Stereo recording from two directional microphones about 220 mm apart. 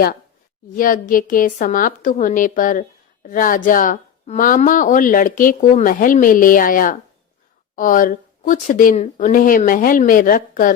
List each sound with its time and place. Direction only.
0.8 s speech: 40° left (ahead or behind)